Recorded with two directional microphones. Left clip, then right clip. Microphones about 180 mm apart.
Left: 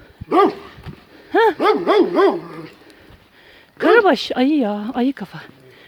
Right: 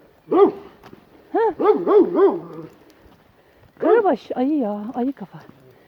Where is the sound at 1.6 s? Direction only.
5° right (ahead or behind).